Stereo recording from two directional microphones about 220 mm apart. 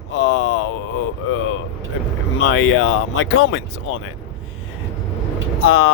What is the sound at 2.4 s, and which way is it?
Speech, 60° left (ahead or behind).